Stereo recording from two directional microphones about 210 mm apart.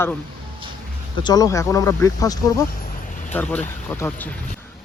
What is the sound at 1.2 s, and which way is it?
Speech, 15° left (ahead or behind).